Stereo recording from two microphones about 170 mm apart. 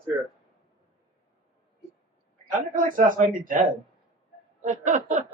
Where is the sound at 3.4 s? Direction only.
50° right (ahead or behind).